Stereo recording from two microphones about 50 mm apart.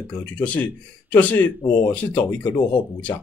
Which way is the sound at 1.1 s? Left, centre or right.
Left.